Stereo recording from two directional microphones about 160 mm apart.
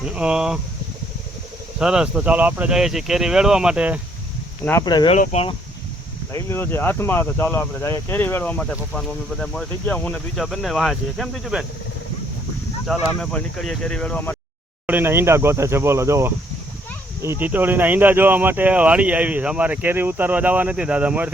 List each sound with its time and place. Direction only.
0.0 s speech: 5° right (ahead or behind)
1.8 s speech: 5° right (ahead or behind)
4.8 s speech: 25° left (ahead or behind)
5.1 s speech: 45° left (ahead or behind)
6.3 s speech: 15° left (ahead or behind)
12.8 s speech: centre (ahead or behind)
14.8 s speech: 15° right (ahead or behind)